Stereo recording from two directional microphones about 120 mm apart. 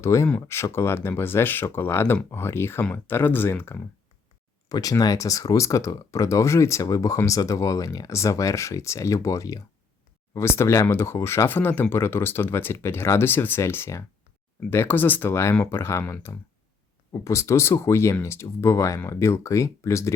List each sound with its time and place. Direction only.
0.0 s speech: 25° left (ahead or behind)
4.7 s speech: 30° left (ahead or behind)